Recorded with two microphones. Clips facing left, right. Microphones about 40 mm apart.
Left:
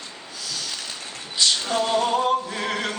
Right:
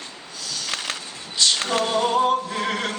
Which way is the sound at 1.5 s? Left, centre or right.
Right.